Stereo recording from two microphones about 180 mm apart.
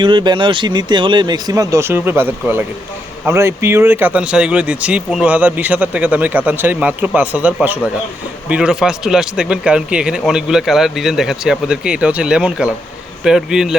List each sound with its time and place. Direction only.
0.0 s a man's voice: 25° right (ahead or behind); by 13.7 s centre (ahead or behind)